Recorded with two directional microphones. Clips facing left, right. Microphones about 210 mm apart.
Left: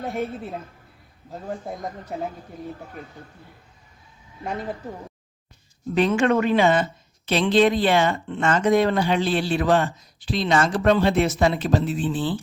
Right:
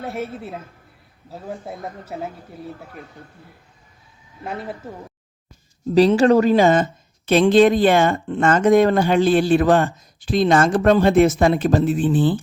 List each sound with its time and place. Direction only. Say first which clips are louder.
0.0 s speech: even; centre (ahead or behind)
4.4 s speech: even; 5° right (ahead or behind)
5.9 s speech: right 6 dB; 35° right (ahead or behind)